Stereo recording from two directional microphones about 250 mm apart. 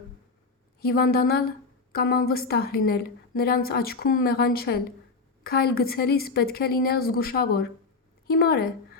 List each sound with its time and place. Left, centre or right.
0.8 s a woman's voice: left